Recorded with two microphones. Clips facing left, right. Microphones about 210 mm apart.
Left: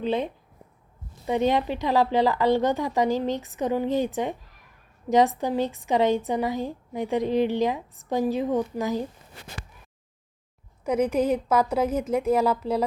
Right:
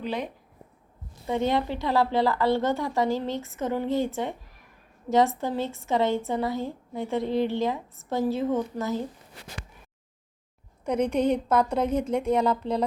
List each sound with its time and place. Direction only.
0.0 s a woman's voice: 25° left (ahead or behind)
1.3 s a woman's voice: 15° left (ahead or behind)
10.8 s speech: 5° left (ahead or behind)